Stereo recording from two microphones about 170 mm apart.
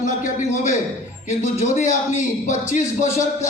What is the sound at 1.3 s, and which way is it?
Speech, 45° left (ahead or behind).